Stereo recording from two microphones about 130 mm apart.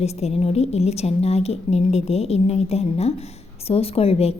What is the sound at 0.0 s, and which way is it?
A woman's voice, 55° left (ahead or behind).